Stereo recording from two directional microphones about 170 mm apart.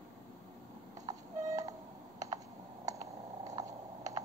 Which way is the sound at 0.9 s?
20° right (ahead or behind).